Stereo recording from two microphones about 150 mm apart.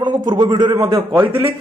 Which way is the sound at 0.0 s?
30° right (ahead or behind).